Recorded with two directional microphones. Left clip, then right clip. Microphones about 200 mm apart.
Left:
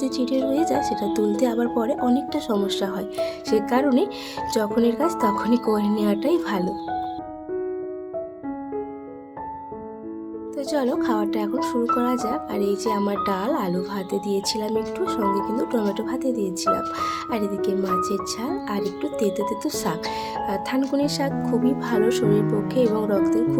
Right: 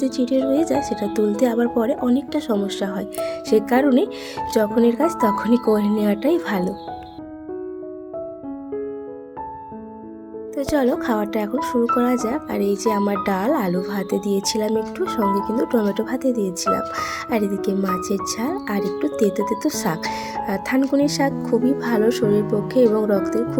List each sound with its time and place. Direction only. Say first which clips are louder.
0.0 s speech: right 3 dB; 10° right (ahead or behind)
10.6 s speech: right 3 dB; 20° right (ahead or behind)